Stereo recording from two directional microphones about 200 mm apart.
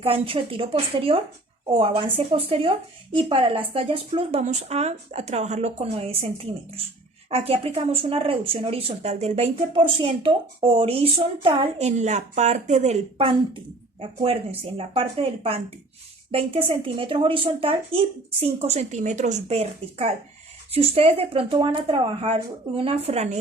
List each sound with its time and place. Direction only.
0.0 s a woman's voice: 30° right (ahead or behind)